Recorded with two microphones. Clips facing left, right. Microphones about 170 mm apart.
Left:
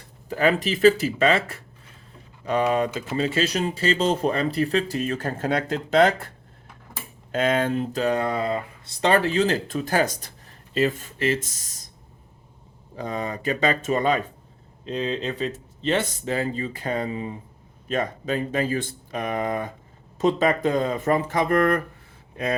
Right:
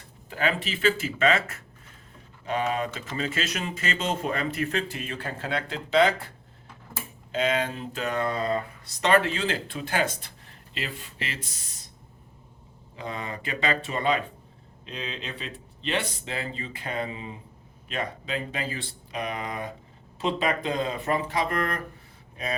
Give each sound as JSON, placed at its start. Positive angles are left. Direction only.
{"t": 0.3, "sound": "speech", "side_deg": 40}
{"t": 7.3, "sound": "speech", "side_deg": 50}
{"t": 8.0, "sound": "speech", "side_deg": 30}
{"t": 8.4, "sound": "speech", "side_deg": 20}
{"t": 9.0, "sound": "speech", "side_deg": 35}
{"t": 13.0, "sound": "speech", "side_deg": 40}